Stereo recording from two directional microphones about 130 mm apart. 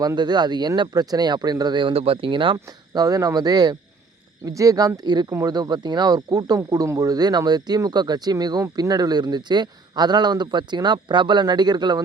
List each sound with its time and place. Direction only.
0.0 s speech: 30° right (ahead or behind)